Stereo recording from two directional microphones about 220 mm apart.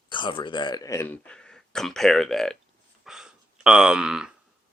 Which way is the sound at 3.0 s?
Centre (ahead or behind).